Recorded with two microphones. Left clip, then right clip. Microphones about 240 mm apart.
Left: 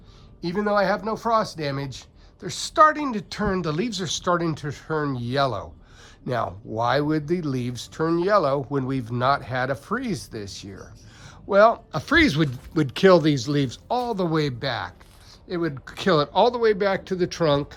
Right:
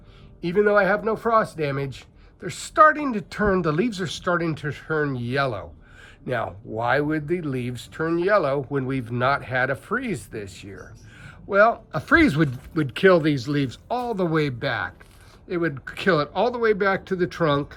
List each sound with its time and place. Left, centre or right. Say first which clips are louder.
0.4 s speech: right 3 dB; centre
11.4 s speech: left 1 dB; centre
12.7 s speech: left 1 dB; centre